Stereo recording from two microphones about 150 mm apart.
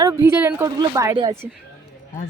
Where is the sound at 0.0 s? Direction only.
20° right (ahead or behind).